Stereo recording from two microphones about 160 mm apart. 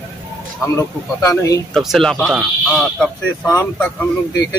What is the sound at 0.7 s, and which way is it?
Speech, 20° left (ahead or behind).